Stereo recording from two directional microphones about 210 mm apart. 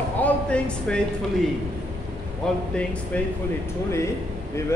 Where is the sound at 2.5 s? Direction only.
5° left (ahead or behind).